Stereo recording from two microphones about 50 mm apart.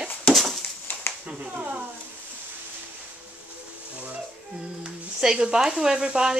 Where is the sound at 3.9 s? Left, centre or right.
Right.